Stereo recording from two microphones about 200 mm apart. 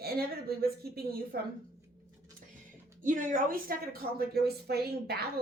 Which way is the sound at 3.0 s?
40° right (ahead or behind).